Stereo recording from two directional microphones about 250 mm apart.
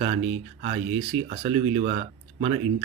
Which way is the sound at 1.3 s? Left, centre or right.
Right.